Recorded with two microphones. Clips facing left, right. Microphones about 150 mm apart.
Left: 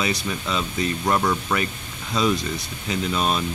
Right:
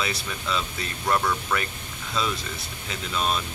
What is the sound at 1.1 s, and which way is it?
Speech, 20° left (ahead or behind).